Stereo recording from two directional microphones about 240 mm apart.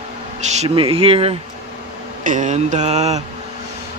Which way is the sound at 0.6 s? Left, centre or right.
Right.